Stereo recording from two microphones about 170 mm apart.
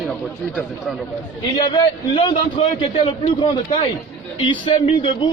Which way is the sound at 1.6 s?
25° left (ahead or behind).